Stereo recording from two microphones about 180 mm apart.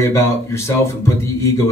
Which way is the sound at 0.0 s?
15° left (ahead or behind).